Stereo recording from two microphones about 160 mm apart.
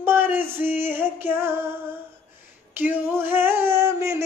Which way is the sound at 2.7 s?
15° right (ahead or behind).